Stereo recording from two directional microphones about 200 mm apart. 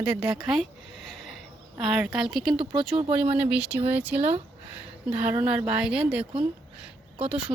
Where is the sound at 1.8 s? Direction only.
5° right (ahead or behind).